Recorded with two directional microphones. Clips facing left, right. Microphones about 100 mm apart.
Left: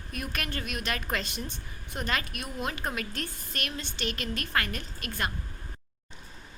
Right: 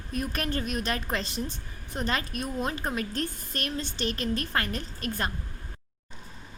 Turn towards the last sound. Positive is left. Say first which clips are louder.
# right 2 dB
turn(degrees=-35)  # may be behind; listen again after turning